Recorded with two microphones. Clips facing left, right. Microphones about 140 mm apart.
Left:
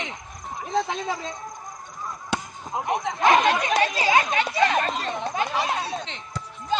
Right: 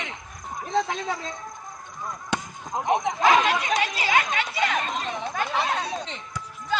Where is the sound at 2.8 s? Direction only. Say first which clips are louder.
Right 3 dB; 20° right (ahead or behind).